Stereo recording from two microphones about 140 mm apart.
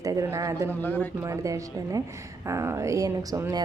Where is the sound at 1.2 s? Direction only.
20° right (ahead or behind).